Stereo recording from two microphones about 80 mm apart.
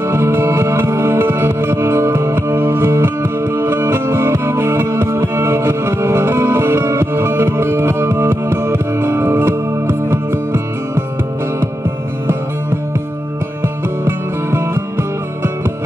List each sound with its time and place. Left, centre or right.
0.1 s music: right
14.0 s music: right